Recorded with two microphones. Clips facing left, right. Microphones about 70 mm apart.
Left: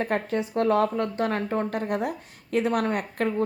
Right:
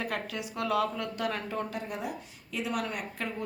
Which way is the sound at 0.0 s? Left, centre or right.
Left.